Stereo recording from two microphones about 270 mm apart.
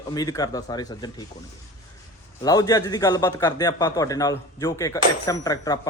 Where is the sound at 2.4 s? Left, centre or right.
Centre.